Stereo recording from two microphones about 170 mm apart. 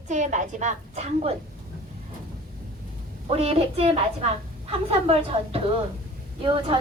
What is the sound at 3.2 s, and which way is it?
Speech, 35° right (ahead or behind).